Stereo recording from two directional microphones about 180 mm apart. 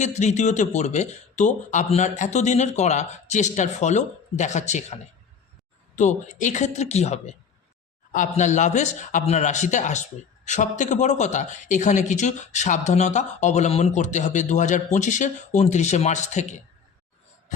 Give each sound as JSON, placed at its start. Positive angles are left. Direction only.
{"t": 0.0, "sound": "speech", "side_deg": 40}
{"t": 6.0, "sound": "speech", "side_deg": 40}